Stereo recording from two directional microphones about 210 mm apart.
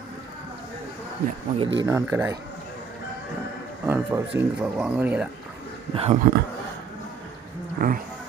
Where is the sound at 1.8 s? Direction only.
15° right (ahead or behind).